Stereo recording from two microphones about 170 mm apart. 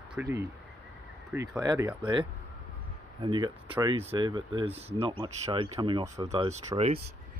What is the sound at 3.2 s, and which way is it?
Speech, 25° right (ahead or behind).